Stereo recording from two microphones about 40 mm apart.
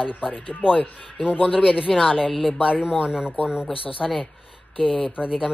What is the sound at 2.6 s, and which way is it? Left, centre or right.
Speech, right.